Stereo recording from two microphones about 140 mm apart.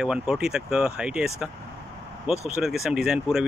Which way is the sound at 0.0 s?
5° right (ahead or behind).